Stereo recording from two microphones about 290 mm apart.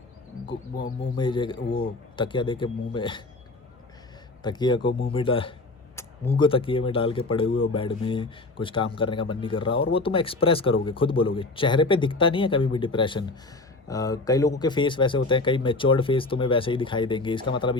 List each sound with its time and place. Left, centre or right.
1.1 s speech: centre
4.4 s speech: centre